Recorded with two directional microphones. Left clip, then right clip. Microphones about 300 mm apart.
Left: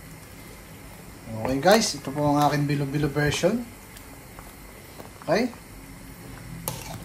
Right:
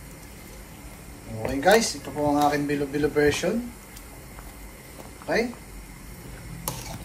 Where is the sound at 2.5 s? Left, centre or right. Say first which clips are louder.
Right 1 dB; centre.